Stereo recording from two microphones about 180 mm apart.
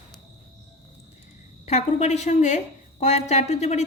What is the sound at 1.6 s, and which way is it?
A woman's voice, 40° left (ahead or behind).